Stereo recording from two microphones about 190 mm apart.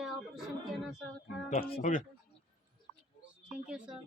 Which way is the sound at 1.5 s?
50° left (ahead or behind).